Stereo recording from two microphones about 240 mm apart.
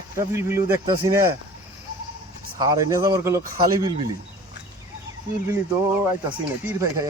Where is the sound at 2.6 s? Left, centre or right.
Centre.